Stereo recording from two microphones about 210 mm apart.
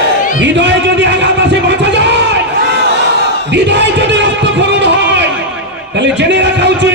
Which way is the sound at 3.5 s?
55° right (ahead or behind).